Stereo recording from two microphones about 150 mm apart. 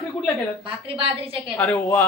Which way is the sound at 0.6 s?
35° right (ahead or behind).